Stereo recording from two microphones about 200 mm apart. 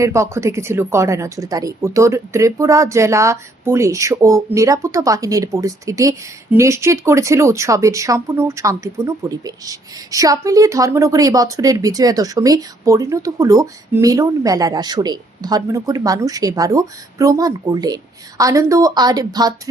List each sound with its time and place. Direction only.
0.0 s a woman's voice: 15° right (ahead or behind)